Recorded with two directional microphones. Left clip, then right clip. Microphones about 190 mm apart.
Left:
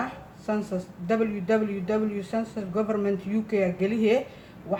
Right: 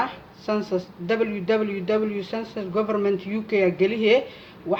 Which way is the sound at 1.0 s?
45° right (ahead or behind).